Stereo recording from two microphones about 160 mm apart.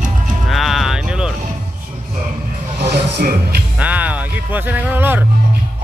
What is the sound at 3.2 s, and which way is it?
Speech, 65° right (ahead or behind).